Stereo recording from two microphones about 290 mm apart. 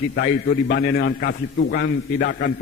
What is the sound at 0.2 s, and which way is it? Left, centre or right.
A man's voice, left.